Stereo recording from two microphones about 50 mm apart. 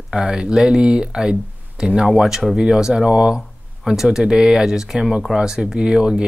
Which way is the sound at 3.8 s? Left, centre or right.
Centre.